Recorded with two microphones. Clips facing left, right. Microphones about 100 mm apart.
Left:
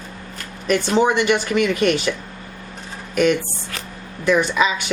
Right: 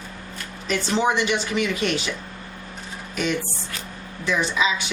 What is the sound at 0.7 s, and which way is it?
Speech, 55° left (ahead or behind).